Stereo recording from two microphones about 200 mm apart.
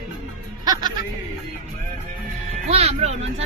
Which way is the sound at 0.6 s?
20° right (ahead or behind).